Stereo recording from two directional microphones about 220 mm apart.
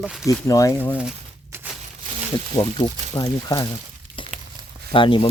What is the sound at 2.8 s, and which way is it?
Speech, 15° left (ahead or behind).